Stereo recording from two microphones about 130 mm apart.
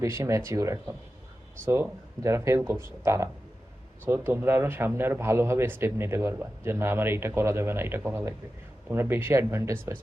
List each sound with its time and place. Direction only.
0.0 s a man's voice: 20° right (ahead or behind)